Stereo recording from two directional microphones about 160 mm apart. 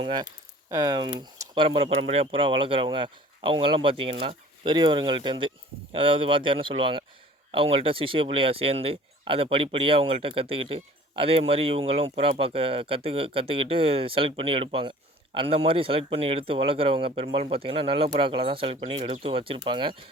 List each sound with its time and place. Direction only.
0.0 s speech: 30° right (ahead or behind)